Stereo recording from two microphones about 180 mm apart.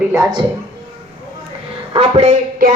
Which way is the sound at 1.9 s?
35° right (ahead or behind).